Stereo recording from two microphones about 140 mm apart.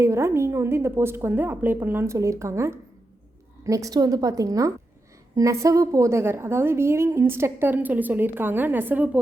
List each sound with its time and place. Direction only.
0.0 s a woman's voice: 20° right (ahead or behind)